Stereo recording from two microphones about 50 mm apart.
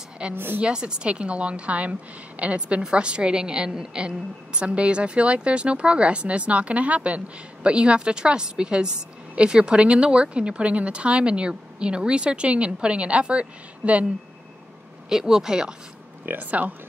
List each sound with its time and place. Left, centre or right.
0.3 s a woman's voice: right
0.6 s a woman's voice: centre
15.0 s speech: centre
16.3 s speech: right